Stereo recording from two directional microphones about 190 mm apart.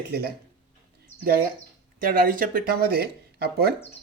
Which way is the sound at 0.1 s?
55° right (ahead or behind).